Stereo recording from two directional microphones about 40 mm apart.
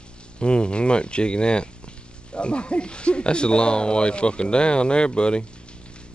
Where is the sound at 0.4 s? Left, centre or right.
Left.